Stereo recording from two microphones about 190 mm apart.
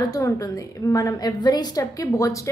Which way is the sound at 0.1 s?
15° left (ahead or behind).